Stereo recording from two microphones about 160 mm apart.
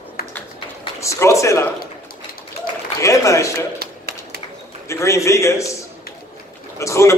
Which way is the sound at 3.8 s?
75° right (ahead or behind).